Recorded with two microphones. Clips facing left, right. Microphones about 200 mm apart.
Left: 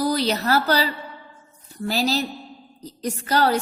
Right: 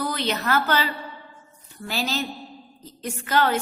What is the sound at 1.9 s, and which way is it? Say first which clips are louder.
A woman's voice: left 5 dB; 35° left (ahead or behind).